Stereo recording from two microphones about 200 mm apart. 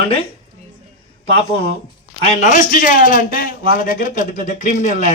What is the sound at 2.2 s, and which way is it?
A man's voice, 35° left (ahead or behind).